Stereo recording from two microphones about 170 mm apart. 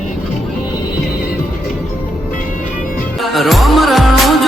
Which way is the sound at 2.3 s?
50° left (ahead or behind).